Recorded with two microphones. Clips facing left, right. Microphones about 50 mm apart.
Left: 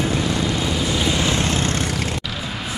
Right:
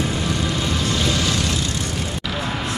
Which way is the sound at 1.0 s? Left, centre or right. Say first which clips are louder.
Left 1 dB; left.